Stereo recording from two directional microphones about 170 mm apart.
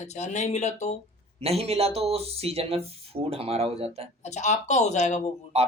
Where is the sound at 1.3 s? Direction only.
35° right (ahead or behind).